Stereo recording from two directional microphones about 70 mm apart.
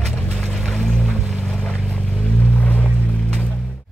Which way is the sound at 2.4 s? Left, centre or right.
Left.